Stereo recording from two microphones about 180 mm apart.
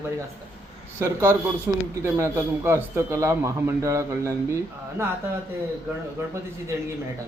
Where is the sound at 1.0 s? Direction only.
15° right (ahead or behind).